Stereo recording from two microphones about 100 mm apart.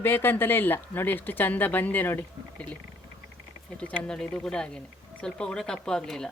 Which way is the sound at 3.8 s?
15° left (ahead or behind).